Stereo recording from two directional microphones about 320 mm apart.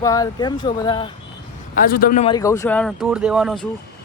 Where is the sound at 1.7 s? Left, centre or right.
Left; by 3.7 s centre.